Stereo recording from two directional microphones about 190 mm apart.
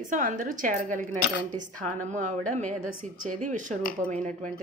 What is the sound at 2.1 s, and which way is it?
A woman's voice, 40° right (ahead or behind).